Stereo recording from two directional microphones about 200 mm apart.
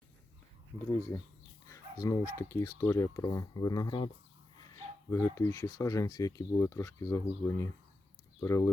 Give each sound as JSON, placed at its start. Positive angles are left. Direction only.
{"t": 0.9, "sound": "speech", "side_deg": 15}